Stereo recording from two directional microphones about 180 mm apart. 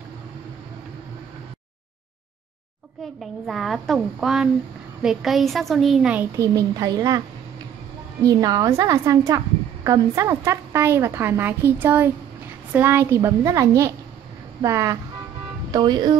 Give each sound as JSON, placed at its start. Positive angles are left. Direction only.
{"t": 3.2, "sound": "a woman's voice", "side_deg": 0}
{"t": 6.3, "sound": "a woman's voice", "side_deg": -20}
{"t": 8.2, "sound": "a woman's voice", "side_deg": -20}